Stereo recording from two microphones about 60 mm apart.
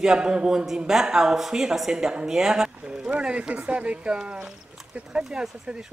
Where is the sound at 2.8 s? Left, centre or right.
Centre.